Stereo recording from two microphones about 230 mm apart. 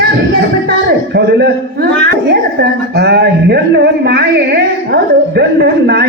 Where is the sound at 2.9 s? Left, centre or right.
Right.